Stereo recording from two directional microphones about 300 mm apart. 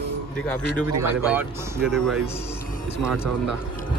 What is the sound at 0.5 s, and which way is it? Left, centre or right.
A man's voice, centre.